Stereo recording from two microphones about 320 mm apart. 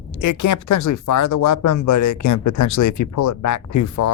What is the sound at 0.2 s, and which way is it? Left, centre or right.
Speech, left.